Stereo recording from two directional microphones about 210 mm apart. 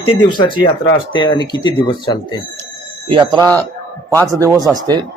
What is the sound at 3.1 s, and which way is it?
A man's voice, 20° right (ahead or behind).